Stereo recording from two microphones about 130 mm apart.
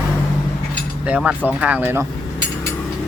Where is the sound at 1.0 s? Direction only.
10° right (ahead or behind).